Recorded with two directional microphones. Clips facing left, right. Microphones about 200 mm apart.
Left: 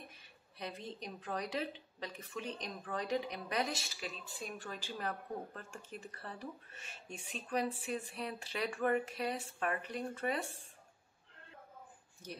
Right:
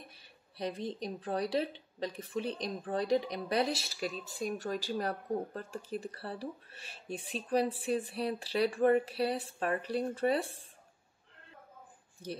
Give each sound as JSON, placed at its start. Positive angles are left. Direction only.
{"t": 0.1, "sound": "speech", "side_deg": -35}